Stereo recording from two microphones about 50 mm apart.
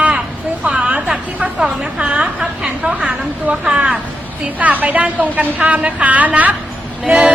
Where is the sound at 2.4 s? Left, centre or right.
Centre.